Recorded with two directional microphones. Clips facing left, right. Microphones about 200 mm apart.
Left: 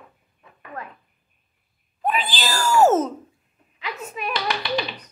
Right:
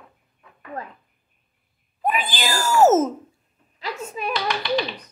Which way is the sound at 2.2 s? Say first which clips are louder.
Right 1 dB; 50° right (ahead or behind).